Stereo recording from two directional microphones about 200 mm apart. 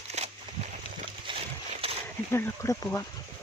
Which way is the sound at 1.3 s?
30° right (ahead or behind).